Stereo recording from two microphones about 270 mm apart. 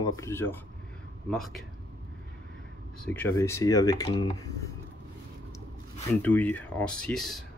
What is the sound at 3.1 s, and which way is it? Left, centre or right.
Speech, centre.